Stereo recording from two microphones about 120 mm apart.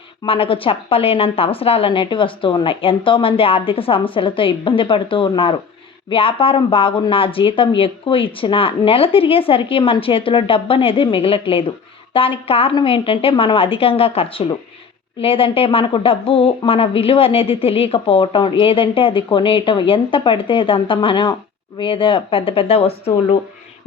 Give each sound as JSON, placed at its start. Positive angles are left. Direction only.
{"t": 0.3, "sound": "a woman's voice", "side_deg": 50}